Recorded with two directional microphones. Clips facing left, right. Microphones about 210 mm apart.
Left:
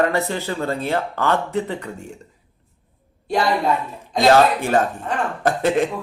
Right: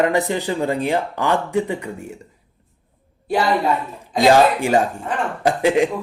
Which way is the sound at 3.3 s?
5° right (ahead or behind).